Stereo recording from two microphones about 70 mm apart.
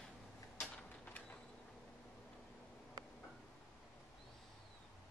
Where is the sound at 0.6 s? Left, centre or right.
Centre.